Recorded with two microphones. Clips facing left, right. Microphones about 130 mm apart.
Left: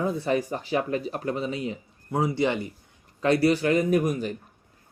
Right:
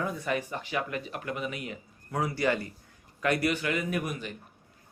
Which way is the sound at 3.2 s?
30° left (ahead or behind).